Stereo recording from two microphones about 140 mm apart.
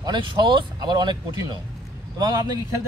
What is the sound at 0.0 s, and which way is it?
Speech, 30° right (ahead or behind).